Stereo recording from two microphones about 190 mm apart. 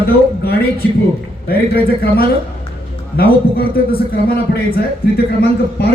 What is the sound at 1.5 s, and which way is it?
Speech, 50° left (ahead or behind).